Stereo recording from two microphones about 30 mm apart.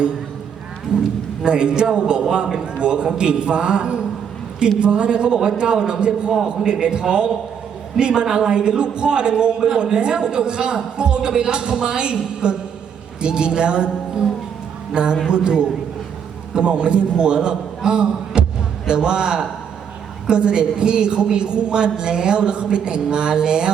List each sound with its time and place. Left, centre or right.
1.5 s a man's voice: right
6.3 s a man's voice: centre
6.7 s a man's voice: right
14.9 s a man's voice: right